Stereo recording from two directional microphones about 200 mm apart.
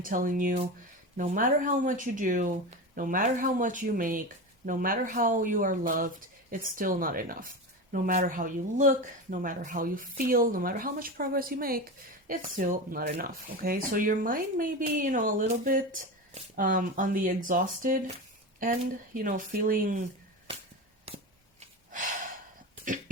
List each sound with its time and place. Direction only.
0.0 s speech: 40° right (ahead or behind)